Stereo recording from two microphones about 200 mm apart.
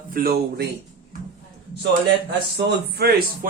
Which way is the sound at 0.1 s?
50° right (ahead or behind).